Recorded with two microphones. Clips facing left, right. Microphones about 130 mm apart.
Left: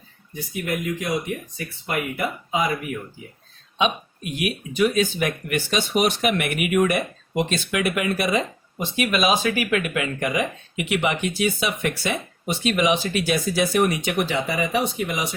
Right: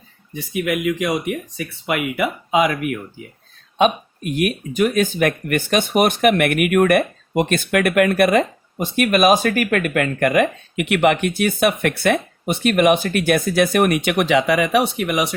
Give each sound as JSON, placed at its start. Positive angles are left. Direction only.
{"t": 0.3, "sound": "speech", "side_deg": -75}
{"t": 3.8, "sound": "speech", "side_deg": -50}